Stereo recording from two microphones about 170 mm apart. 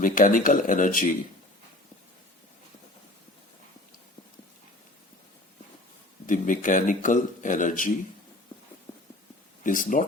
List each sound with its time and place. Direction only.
0.0 s a man's voice: 55° left (ahead or behind)
6.2 s a man's voice: 50° left (ahead or behind)
9.6 s a man's voice: 50° left (ahead or behind)